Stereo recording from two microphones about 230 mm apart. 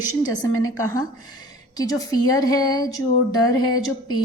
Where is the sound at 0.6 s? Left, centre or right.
Centre.